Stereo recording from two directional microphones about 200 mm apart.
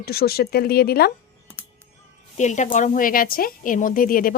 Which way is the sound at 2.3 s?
35° left (ahead or behind).